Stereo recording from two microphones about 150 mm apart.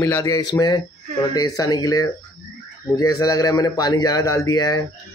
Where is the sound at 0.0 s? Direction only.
20° left (ahead or behind).